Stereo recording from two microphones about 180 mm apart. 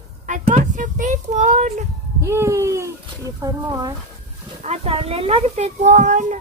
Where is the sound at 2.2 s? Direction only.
15° right (ahead or behind).